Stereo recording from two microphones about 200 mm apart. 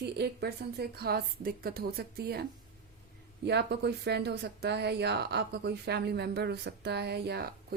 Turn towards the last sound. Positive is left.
turn(degrees=-55)  # may be behind; listen again after turning